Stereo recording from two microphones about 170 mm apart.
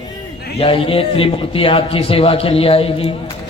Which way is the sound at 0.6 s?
35° left (ahead or behind).